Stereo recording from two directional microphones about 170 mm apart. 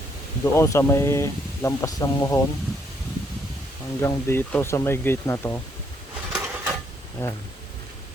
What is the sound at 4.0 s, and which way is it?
Speech, 15° left (ahead or behind).